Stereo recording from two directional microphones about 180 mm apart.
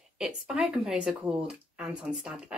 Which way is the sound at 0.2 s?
5° right (ahead or behind).